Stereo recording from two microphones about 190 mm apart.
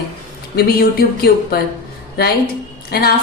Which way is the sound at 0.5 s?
50° left (ahead or behind).